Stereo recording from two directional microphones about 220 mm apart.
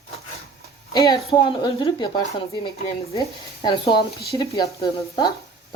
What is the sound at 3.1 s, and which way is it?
Speech, 20° left (ahead or behind).